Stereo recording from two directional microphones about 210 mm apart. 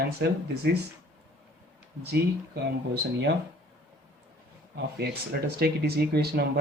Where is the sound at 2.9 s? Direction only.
55° right (ahead or behind).